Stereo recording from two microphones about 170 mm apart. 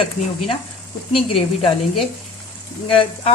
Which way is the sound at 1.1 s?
30° left (ahead or behind).